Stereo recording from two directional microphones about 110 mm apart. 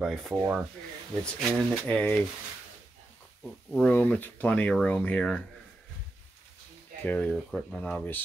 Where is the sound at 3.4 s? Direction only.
10° left (ahead or behind).